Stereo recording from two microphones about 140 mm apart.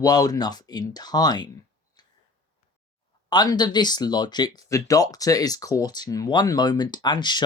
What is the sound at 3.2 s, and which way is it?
Speech, 30° left (ahead or behind).